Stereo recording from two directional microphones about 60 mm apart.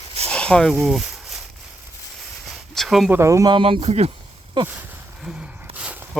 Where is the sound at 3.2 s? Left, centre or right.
Right.